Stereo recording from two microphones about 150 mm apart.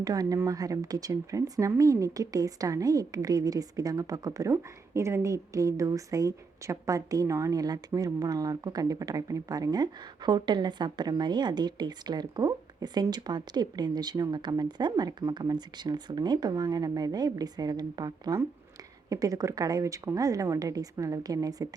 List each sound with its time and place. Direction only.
0.0 s speech: 25° right (ahead or behind)